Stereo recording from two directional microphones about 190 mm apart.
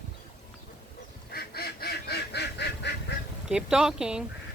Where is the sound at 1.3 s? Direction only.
55° left (ahead or behind).